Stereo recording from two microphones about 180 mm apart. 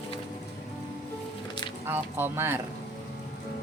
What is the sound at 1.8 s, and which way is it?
Speech, 10° right (ahead or behind).